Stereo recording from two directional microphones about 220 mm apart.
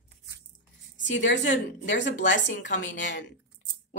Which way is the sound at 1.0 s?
55° left (ahead or behind).